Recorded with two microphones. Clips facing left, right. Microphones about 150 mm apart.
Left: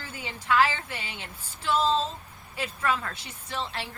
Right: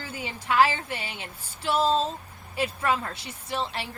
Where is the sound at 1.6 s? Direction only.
10° right (ahead or behind).